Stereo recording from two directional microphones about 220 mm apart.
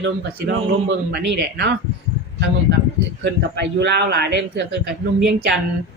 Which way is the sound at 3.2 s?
50° right (ahead or behind).